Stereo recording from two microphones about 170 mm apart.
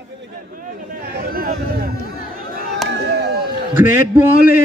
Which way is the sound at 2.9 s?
70° right (ahead or behind).